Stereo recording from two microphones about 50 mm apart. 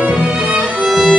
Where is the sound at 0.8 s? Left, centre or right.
Centre.